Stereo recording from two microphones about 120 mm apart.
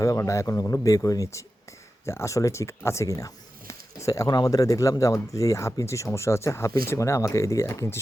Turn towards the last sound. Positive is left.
turn(degrees=20)  # may be behind; listen again after turning